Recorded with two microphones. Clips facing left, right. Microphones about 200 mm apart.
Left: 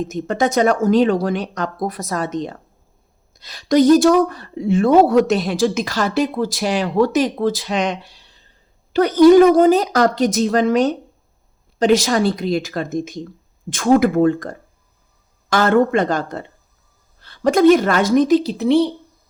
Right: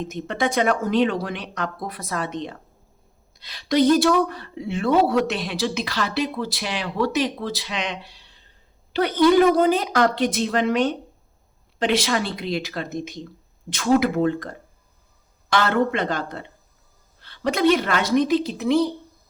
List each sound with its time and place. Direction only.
0.0 s a woman's voice: 45° left (ahead or behind)